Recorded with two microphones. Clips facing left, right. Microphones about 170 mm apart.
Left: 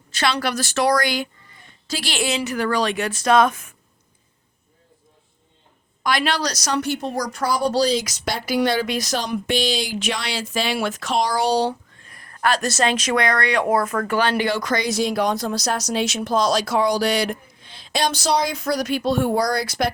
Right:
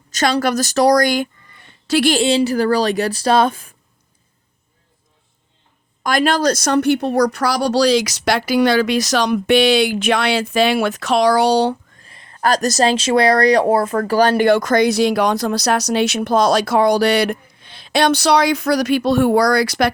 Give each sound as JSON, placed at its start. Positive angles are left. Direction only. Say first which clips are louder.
{"t": 0.1, "sound": "a woman's voice", "louder": "right 6 dB", "side_deg": -40}
{"t": 1.6, "sound": "a sound", "louder": "right 12 dB", "side_deg": -70}
{"t": 2.2, "sound": "a woman's voice", "louder": "right 8 dB", "side_deg": -30}
{"t": 6.0, "sound": "speech", "louder": "right 5 dB", "side_deg": -45}
{"t": 12.0, "sound": "a sound", "louder": "right 1 dB", "side_deg": -25}
{"t": 12.4, "sound": "speech", "louder": "right 5 dB", "side_deg": -40}